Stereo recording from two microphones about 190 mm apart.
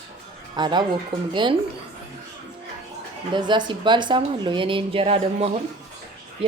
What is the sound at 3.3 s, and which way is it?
A woman's voice, 25° right (ahead or behind).